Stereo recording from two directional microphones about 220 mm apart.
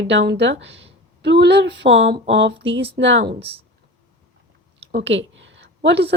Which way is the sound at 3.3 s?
25° right (ahead or behind).